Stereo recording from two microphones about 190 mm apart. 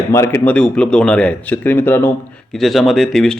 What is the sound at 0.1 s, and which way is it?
Speech, 15° left (ahead or behind).